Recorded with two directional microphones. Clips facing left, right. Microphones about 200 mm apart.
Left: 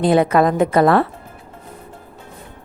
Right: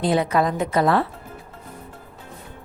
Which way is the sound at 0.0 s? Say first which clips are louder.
Left 6 dB; 55° left (ahead or behind).